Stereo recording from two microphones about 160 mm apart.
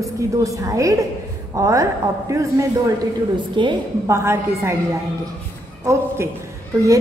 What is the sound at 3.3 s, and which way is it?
Speech, 30° right (ahead or behind).